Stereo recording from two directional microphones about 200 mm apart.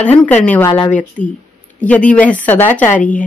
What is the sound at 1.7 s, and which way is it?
A woman's voice, 5° left (ahead or behind).